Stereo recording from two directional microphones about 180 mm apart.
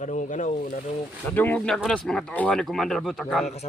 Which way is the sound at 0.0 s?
45° left (ahead or behind).